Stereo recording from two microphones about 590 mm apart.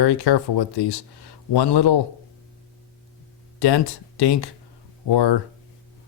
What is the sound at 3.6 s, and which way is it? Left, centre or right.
Speech, left.